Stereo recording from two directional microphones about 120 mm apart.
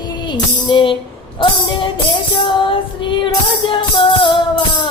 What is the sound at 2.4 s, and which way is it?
Music, 45° left (ahead or behind).